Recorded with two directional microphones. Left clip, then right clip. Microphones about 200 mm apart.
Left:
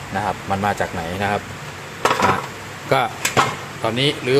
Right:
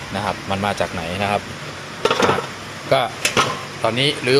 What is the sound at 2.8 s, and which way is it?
Speech, 20° left (ahead or behind).